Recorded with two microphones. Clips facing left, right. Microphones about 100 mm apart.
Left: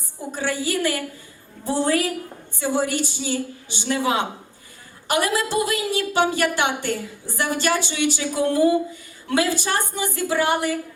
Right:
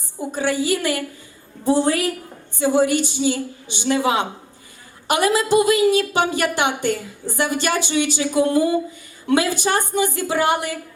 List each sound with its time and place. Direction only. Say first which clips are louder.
0.3 s a woman's voice: right 4 dB; 20° right (ahead or behind)